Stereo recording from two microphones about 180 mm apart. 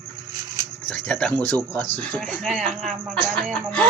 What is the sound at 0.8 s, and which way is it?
Speech, 5° left (ahead or behind).